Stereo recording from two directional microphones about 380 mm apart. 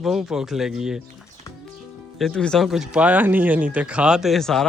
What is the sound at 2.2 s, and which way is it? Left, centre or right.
Speech, centre.